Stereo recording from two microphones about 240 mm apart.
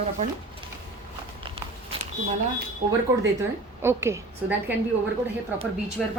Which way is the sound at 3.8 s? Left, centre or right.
Centre.